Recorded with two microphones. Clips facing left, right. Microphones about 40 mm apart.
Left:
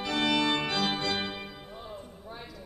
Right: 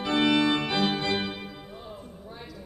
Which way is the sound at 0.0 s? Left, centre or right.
Right.